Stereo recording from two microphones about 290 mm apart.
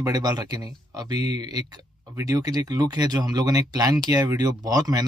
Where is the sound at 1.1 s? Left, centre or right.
Left.